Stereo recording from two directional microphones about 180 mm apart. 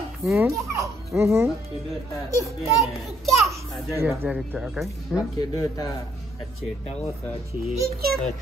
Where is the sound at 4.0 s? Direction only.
10° right (ahead or behind).